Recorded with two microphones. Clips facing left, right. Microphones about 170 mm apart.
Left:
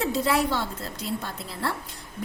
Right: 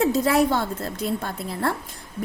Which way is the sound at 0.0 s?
45° right (ahead or behind).